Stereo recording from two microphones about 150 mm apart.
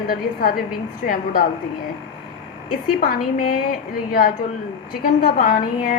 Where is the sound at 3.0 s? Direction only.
80° left.